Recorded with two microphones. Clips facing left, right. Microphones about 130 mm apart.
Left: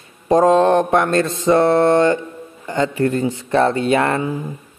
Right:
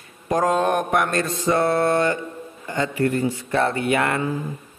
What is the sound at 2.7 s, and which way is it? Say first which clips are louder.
A man's voice: left 4 dB; 25° left (ahead or behind).